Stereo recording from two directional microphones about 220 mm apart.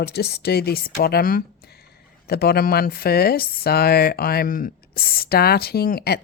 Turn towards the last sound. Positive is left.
turn(degrees=45)  # may be behind; listen again after turning